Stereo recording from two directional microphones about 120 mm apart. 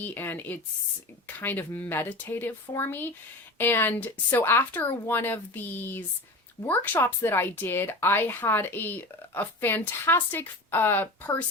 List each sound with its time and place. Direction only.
0.0 s speech: 15° left (ahead or behind)